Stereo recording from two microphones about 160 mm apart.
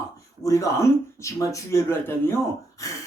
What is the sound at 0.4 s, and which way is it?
Speech, 20° left (ahead or behind).